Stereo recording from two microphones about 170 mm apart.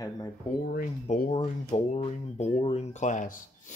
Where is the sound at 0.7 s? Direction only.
55° left (ahead or behind).